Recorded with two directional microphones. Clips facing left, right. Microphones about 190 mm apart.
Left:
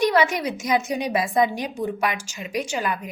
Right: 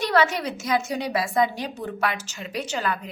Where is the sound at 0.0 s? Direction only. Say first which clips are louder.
Left 2 dB; 15° left (ahead or behind).